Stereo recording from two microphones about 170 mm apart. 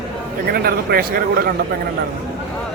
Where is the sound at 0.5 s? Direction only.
65° right (ahead or behind).